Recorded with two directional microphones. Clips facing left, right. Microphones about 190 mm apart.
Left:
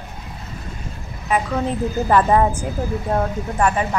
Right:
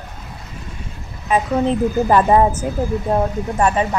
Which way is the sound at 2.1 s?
25° right (ahead or behind).